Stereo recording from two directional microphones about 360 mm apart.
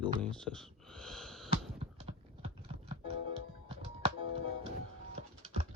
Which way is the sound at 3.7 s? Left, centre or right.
Centre.